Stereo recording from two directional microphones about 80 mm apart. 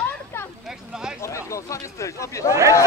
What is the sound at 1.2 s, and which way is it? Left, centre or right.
Speech, left.